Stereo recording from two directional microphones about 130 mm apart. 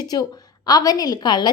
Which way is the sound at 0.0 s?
30° left (ahead or behind).